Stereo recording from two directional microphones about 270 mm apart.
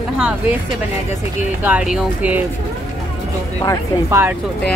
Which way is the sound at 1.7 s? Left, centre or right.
Centre.